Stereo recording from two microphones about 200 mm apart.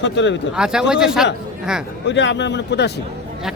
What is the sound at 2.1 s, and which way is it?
Speech, 65° left (ahead or behind).